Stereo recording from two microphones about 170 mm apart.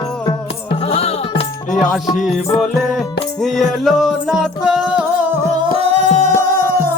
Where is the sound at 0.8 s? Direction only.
35° left (ahead or behind).